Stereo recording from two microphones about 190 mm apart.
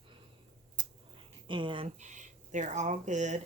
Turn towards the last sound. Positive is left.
turn(degrees=-40)  # may be behind; listen again after turning